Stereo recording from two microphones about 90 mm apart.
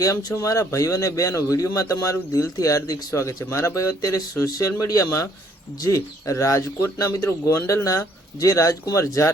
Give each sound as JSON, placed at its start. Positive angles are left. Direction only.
{"t": 0.0, "sound": "speech", "side_deg": 40}